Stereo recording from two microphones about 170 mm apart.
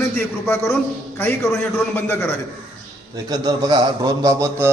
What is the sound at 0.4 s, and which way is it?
Speech, 15° left (ahead or behind).